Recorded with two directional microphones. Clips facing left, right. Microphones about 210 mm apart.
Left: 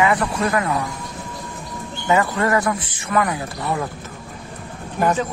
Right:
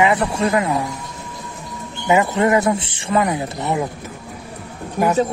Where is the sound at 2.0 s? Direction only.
20° right (ahead or behind).